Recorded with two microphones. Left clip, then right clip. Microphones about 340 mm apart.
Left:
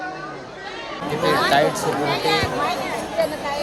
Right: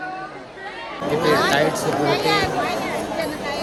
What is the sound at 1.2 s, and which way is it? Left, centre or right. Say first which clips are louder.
Speech: left 1 dB; centre.